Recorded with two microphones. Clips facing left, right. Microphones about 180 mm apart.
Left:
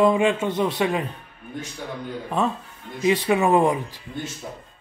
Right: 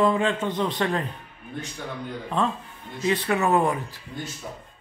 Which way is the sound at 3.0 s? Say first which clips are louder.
Left 4 dB; 15° left (ahead or behind).